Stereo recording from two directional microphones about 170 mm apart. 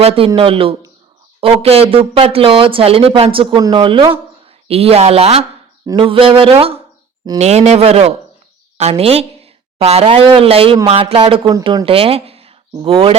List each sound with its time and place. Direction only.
0.0 s a woman's voice: 35° right (ahead or behind)
5.8 s a woman's voice: 25° right (ahead or behind)